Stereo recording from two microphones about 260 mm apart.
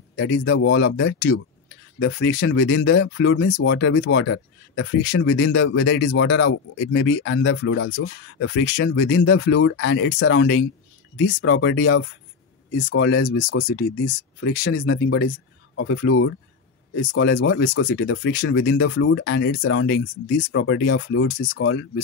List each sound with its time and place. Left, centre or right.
0.1 s speech: left
14.0 s speech: left
14.6 s speech: left